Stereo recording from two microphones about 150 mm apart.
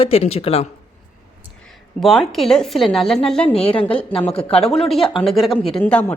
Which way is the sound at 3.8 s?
35° left (ahead or behind).